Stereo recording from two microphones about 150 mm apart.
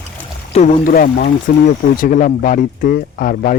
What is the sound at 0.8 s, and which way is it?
Speech, 75° left (ahead or behind).